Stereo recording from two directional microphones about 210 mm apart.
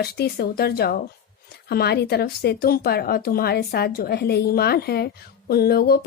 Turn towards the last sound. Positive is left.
turn(degrees=50)  # may be behind; listen again after turning